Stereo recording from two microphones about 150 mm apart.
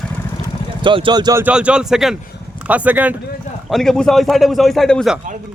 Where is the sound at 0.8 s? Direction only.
35° right (ahead or behind).